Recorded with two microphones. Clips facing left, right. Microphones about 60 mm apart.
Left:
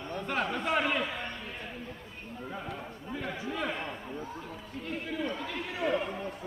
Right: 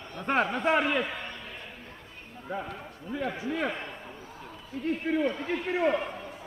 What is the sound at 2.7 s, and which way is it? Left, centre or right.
Speech, centre.